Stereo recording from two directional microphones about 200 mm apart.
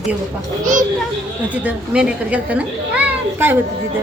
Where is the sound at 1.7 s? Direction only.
5° right (ahead or behind).